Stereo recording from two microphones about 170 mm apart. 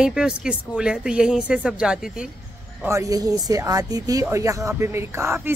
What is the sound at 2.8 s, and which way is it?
A man's voice, 20° right (ahead or behind).